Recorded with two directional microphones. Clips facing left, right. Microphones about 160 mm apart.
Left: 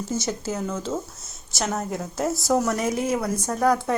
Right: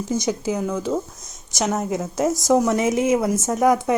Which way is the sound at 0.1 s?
15° right (ahead or behind).